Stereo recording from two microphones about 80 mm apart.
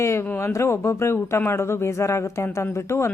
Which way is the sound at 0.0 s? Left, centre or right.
Left.